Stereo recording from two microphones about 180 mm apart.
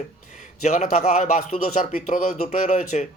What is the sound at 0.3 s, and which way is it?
A man's voice, 40° left (ahead or behind).